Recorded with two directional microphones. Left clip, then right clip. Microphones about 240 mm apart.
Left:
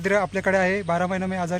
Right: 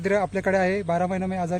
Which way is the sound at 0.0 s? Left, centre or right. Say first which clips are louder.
Left 1 dB; centre.